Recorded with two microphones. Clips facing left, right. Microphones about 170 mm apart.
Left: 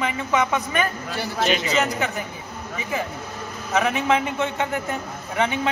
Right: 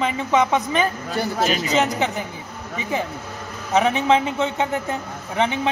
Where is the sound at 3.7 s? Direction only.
20° right (ahead or behind).